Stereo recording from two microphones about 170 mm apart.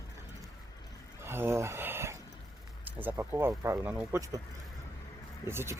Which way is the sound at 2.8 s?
10° right (ahead or behind).